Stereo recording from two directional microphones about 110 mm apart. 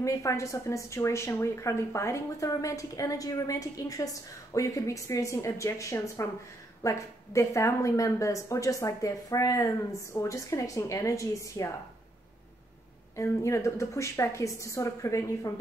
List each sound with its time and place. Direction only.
0.0 s a woman's voice: 30° left (ahead or behind)
13.1 s a woman's voice: 25° left (ahead or behind)